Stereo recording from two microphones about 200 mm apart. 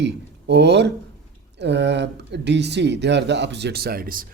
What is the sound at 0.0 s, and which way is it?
Speech, 60° right (ahead or behind).